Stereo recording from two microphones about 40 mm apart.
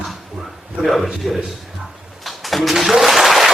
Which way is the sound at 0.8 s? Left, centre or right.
Centre.